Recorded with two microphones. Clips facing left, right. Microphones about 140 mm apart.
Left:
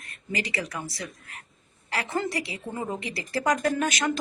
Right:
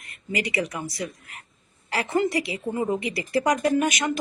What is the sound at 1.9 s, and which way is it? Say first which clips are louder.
A woman's voice: right 5 dB; 20° right (ahead or behind).